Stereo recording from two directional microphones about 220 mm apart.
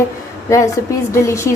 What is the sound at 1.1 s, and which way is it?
Speech, 15° left (ahead or behind).